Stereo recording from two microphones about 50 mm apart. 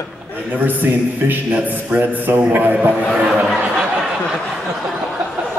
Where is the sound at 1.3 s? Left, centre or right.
Right.